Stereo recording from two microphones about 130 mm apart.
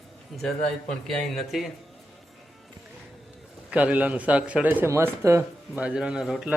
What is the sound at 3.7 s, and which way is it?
A man's voice, 10° right (ahead or behind).